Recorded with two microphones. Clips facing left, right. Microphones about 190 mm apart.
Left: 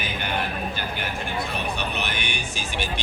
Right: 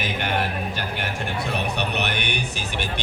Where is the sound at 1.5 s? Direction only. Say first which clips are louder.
Right 3 dB; 70° right (ahead or behind).